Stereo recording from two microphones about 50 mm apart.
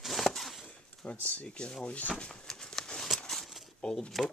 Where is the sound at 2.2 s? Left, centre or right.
Centre.